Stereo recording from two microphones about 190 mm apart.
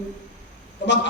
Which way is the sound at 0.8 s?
70° left (ahead or behind).